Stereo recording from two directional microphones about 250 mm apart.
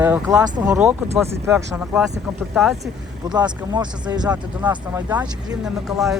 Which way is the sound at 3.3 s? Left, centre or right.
Centre.